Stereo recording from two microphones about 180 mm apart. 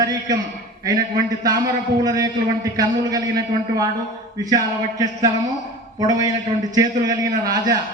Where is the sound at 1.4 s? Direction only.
20° right (ahead or behind).